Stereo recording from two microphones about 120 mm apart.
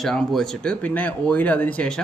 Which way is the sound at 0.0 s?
5° left (ahead or behind).